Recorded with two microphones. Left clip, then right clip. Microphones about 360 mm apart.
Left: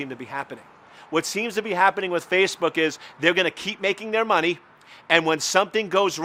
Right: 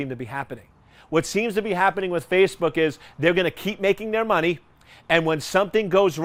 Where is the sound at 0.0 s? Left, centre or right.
Right.